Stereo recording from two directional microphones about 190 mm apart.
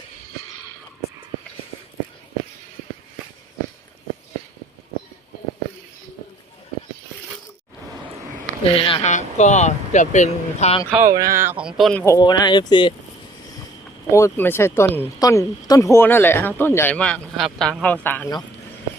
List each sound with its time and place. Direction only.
8.7 s speech: 30° left (ahead or behind)
10.9 s speech: 15° right (ahead or behind); by 12.0 s centre (ahead or behind)
12.0 s speech: 20° left (ahead or behind)
14.1 s speech: 15° left (ahead or behind)